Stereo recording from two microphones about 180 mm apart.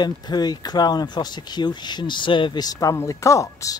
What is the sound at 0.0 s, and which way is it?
Speech, 25° left (ahead or behind).